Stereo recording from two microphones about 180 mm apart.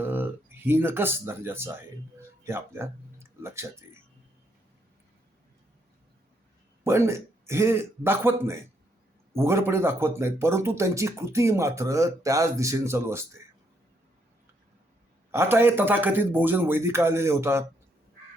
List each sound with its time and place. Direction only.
0.0 s speech: 10° right (ahead or behind)
6.8 s speech: 15° right (ahead or behind)
15.3 s speech: 15° right (ahead or behind)